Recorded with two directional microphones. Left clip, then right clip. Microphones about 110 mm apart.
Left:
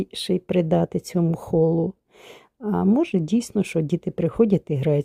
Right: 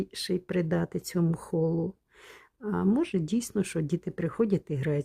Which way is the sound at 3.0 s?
20° left (ahead or behind).